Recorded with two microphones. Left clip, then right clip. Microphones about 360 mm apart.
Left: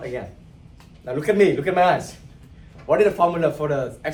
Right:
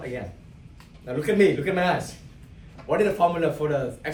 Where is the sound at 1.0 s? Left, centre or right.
Centre.